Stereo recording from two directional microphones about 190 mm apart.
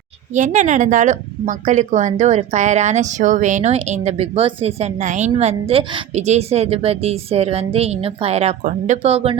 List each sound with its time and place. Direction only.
0.3 s a woman's voice: 40° right (ahead or behind)